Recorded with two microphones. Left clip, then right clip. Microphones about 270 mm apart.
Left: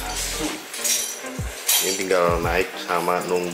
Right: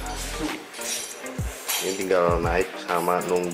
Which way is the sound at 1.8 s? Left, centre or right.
Centre.